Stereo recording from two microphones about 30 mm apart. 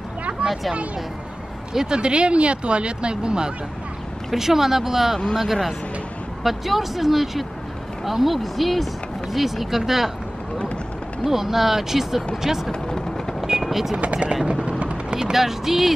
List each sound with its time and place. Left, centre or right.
0.3 s a sound: right
1.7 s speech: right
2.0 s speech: right
4.3 s speech: centre
11.2 s speech: centre
13.7 s vehicle: centre
13.9 s speech: right
14.8 s a sound: right
15.3 s speech: centre